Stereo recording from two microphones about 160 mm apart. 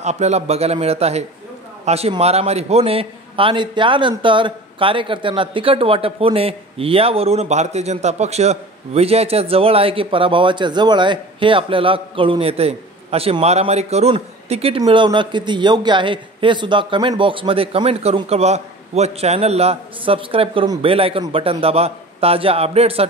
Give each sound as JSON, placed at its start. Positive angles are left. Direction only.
{"t": 0.0, "sound": "speech", "side_deg": -45}
{"t": 14.8, "sound": "speech", "side_deg": -25}